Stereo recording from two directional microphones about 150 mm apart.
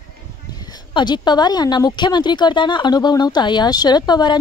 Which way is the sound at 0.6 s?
30° left (ahead or behind).